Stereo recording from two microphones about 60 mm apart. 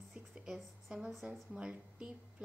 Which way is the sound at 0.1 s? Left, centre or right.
Centre.